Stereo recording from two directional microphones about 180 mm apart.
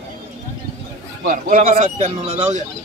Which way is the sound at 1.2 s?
50° right (ahead or behind).